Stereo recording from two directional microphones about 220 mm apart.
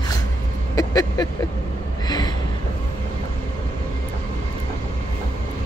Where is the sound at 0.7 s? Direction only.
15° left (ahead or behind).